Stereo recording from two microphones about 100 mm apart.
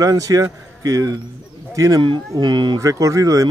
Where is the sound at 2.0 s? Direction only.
50° right (ahead or behind).